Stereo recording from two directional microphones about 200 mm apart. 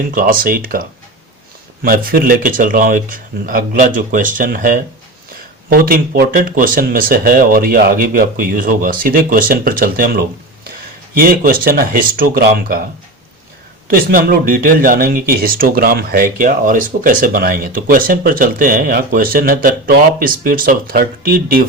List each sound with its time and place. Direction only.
0.1 s speech: 45° right (ahead or behind)
13.9 s speech: 45° right (ahead or behind)